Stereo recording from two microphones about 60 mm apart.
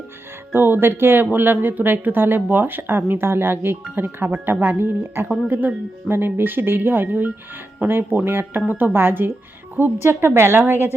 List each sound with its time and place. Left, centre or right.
0.5 s speech: right